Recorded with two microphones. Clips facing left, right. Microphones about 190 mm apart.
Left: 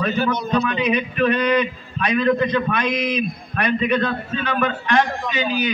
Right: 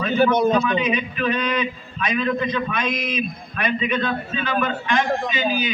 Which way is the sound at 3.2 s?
40° left (ahead or behind).